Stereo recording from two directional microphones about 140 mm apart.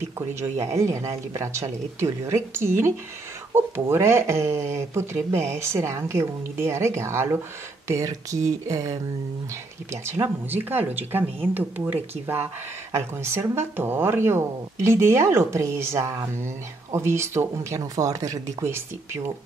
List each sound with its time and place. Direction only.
0.3 s speech: 20° right (ahead or behind)
10.0 s speech: 15° right (ahead or behind)